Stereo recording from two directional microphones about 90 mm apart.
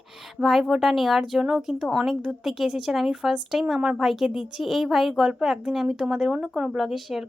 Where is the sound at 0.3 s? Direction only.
Centre (ahead or behind).